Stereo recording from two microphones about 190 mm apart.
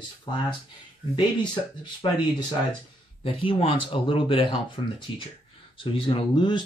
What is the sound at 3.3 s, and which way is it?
Speech, 25° left (ahead or behind).